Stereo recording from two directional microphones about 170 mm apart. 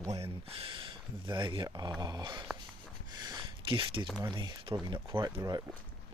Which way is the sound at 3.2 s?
25° right (ahead or behind).